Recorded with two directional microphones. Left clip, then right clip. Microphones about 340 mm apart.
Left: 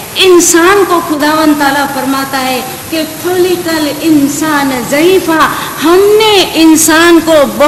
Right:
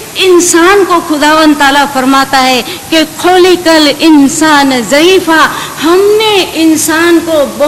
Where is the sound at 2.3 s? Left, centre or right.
Right.